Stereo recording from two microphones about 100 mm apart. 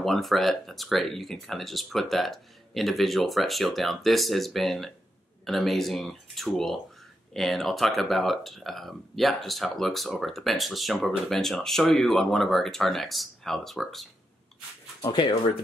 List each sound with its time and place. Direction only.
0.0 s speech: centre (ahead or behind)
15.0 s speech: 55° left (ahead or behind)